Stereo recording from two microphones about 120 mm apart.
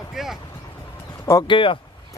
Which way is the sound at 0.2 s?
Centre (ahead or behind).